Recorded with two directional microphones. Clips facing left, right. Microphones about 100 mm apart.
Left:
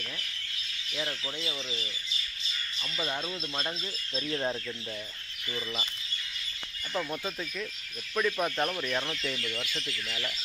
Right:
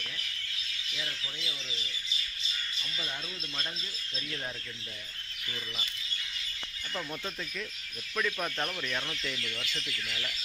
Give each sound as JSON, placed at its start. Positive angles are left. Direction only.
{"t": 0.9, "sound": "speech", "side_deg": 40}
{"t": 4.3, "sound": "speech", "side_deg": 35}
{"t": 6.9, "sound": "speech", "side_deg": 15}